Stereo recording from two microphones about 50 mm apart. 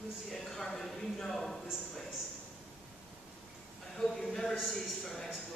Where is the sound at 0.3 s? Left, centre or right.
Centre.